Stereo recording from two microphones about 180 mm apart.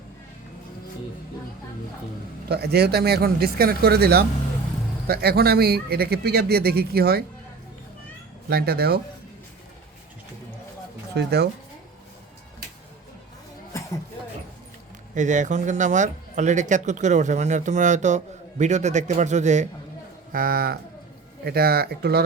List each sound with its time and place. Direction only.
2.5 s speech: 65° right (ahead or behind)
8.4 s speech: 60° right (ahead or behind)
11.1 s speech: 65° right (ahead or behind)
13.7 s a sound: 15° left (ahead or behind)
15.1 s speech: 45° right (ahead or behind)
20.3 s speech: 55° right (ahead or behind)